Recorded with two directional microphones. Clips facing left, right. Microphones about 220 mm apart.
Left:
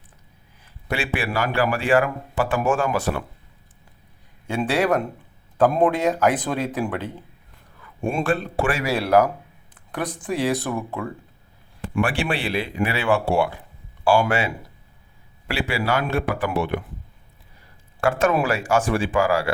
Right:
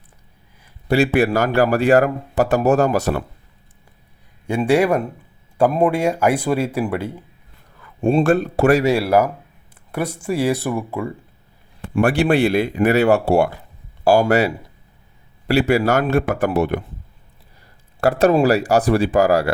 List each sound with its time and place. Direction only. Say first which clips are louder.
0.9 s speech: right 10 dB; 40° right (ahead or behind)
4.4 s speech: right 5 dB; 10° right (ahead or behind)
8.2 s speech: right 6 dB; 45° right (ahead or behind)
9.0 s speech: right 1 dB; 10° right (ahead or behind)
11.9 s speech: right 8 dB; 40° right (ahead or behind)
18.0 s speech: right 6 dB; 35° right (ahead or behind)